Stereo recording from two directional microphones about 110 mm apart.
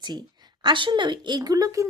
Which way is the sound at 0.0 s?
40° right (ahead or behind).